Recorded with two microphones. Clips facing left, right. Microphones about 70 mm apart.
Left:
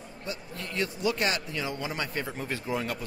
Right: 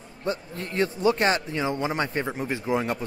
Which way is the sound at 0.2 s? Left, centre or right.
Right.